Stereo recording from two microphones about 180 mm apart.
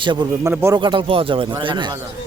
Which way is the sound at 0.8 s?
25° right (ahead or behind).